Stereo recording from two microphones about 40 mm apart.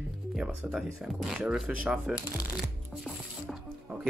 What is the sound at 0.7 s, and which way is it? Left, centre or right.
Speech, centre.